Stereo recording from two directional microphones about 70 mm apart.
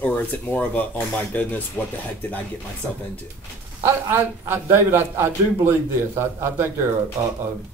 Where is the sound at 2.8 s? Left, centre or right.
Right.